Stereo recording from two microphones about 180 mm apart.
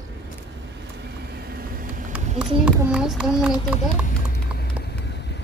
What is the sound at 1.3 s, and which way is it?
Vehicle, 60° right (ahead or behind).